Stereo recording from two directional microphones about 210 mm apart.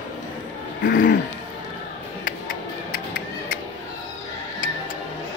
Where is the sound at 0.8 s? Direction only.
40° left (ahead or behind).